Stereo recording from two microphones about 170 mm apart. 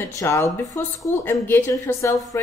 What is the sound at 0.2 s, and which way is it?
A woman's voice, 20° left (ahead or behind).